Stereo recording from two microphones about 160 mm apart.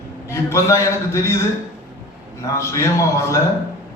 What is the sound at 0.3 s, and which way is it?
Speech, 20° left (ahead or behind).